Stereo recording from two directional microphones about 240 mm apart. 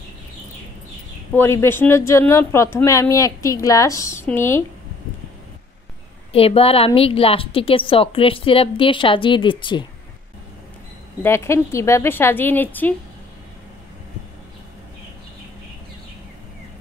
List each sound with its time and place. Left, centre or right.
1.3 s speech: centre
6.3 s a woman's voice: left
11.2 s speech: centre